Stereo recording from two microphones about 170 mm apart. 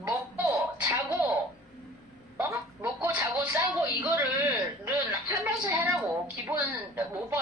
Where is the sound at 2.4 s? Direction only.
10° right (ahead or behind).